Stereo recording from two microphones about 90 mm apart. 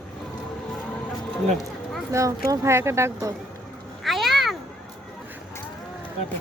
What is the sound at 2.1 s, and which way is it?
Speech, 35° right (ahead or behind).